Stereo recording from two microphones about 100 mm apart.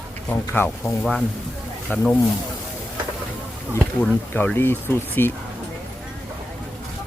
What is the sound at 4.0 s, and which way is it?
Speech, 15° left (ahead or behind).